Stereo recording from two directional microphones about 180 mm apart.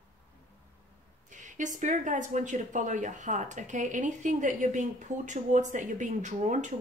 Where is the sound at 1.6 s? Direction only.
45° right (ahead or behind).